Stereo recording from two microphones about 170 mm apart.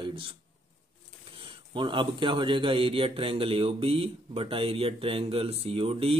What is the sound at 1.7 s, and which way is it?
A man's voice, 30° right (ahead or behind).